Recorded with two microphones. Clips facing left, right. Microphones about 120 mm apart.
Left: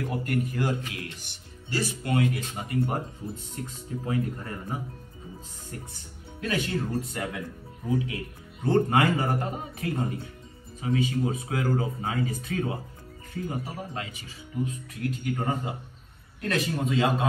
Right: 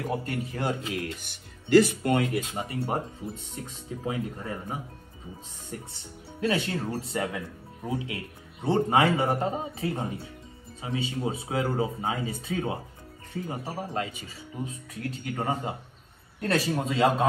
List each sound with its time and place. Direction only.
0.0 s speech: 30° right (ahead or behind)
1.7 s speech: 60° right (ahead or behind)
2.1 s a man's voice: 30° right (ahead or behind)